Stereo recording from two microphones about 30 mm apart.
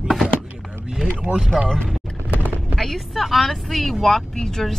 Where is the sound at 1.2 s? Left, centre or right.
Right.